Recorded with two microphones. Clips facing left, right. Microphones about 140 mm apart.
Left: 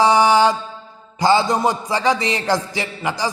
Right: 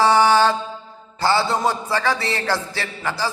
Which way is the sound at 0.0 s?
15° left (ahead or behind).